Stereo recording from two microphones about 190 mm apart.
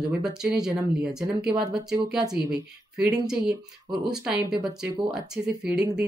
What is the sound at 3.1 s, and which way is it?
Speech, 5° right (ahead or behind).